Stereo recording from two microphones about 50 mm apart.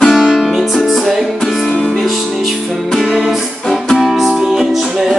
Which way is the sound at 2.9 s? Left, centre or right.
Centre.